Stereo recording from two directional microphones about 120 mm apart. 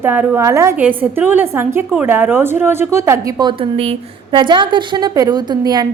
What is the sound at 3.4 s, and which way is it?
Speech, 40° right (ahead or behind).